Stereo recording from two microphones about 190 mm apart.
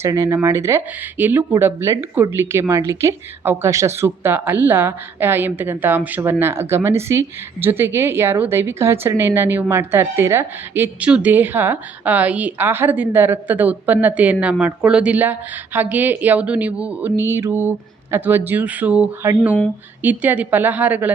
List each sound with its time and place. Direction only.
0.0 s a woman's voice: 15° right (ahead or behind)